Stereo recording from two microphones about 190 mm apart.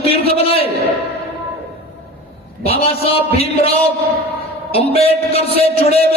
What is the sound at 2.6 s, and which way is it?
A man's voice, 30° left (ahead or behind).